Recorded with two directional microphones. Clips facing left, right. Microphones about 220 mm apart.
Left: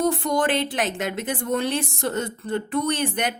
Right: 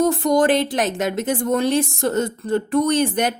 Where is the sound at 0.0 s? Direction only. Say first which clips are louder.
Right 5 dB; 40° right (ahead or behind).